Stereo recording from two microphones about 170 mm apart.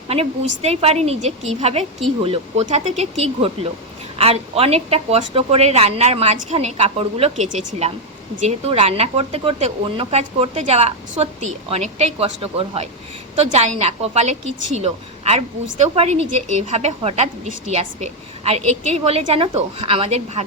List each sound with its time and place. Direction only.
0.6 s a woman's voice: 35° right (ahead or behind)